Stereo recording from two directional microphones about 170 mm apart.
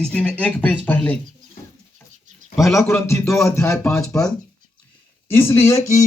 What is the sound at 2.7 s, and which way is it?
A man's voice, 15° left (ahead or behind).